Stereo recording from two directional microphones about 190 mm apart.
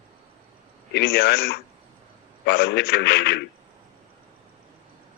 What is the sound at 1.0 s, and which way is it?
A man's voice, 60° left (ahead or behind).